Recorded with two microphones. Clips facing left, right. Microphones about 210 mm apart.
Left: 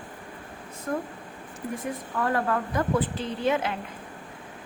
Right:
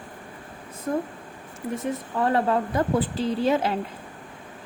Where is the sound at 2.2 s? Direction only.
25° right (ahead or behind).